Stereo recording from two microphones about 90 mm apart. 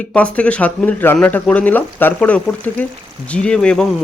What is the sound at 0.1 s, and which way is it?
Speech, 15° left (ahead or behind).